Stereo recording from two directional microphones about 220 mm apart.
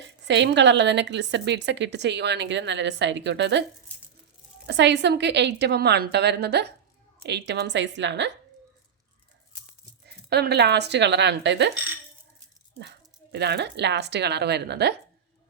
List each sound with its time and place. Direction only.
0.0 s a woman's voice: 55° right (ahead or behind)
4.6 s a woman's voice: 50° right (ahead or behind)
10.1 s a woman's voice: 45° right (ahead or behind)
12.8 s a woman's voice: 50° right (ahead or behind)